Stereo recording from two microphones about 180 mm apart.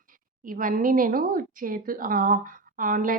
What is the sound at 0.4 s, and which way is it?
A woman's voice, 50° right (ahead or behind).